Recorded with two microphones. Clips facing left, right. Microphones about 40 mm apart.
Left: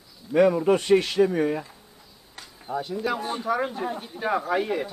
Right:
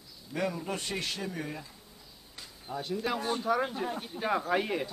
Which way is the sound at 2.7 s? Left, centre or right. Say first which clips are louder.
Left 8 dB; centre.